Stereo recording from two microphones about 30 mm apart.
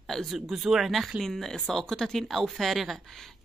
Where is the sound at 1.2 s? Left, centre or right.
Centre.